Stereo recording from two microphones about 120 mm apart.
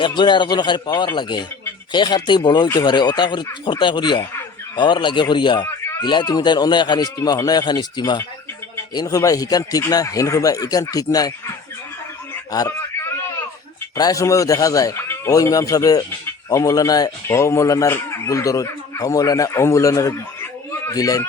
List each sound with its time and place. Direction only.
0.0 s a man's voice: 40° left (ahead or behind)
13.9 s speech: 30° left (ahead or behind)